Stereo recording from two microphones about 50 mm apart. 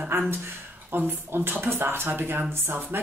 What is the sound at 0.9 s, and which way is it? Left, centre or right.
Speech, right.